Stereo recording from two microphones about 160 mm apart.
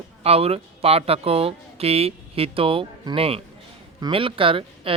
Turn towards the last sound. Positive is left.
turn(degrees=-35)  # may be behind; listen again after turning